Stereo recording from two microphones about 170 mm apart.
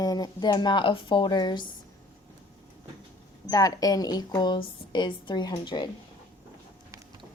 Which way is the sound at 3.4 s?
20° left (ahead or behind).